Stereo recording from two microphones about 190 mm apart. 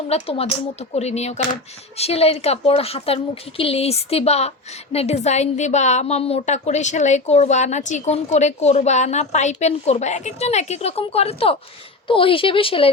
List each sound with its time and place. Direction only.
0.1 s a woman's voice: 30° left (ahead or behind)